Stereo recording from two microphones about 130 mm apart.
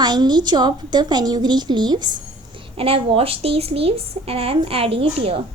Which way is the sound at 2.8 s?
45° right (ahead or behind).